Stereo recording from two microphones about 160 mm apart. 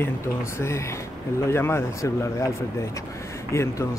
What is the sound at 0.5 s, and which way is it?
Speech, 15° left (ahead or behind).